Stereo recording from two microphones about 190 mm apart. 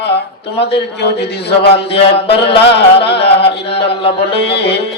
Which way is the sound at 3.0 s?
60° left (ahead or behind).